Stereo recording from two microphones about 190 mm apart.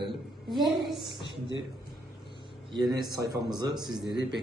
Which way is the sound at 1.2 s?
25° left (ahead or behind).